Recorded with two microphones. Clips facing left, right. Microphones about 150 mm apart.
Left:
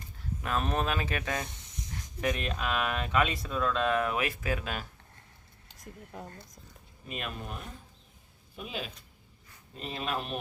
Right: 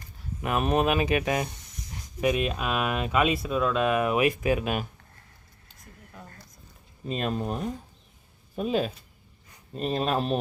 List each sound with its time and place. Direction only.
0.4 s speech: 15° right (ahead or behind)
1.5 s a sound: 20° left (ahead or behind)
2.2 s speech: 15° right (ahead or behind)
7.1 s speech: 35° right (ahead or behind)